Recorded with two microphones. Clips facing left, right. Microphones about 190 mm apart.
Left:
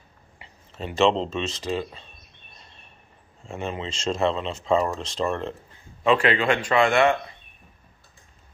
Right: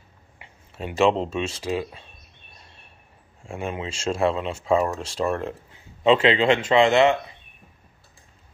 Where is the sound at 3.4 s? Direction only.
10° right (ahead or behind).